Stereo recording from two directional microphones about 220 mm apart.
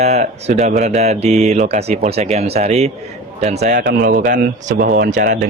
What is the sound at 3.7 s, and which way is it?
Speech, 50° right (ahead or behind).